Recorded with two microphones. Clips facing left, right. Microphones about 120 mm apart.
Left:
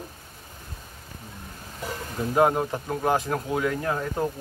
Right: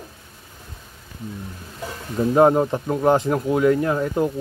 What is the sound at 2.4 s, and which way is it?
Speech, 25° right (ahead or behind).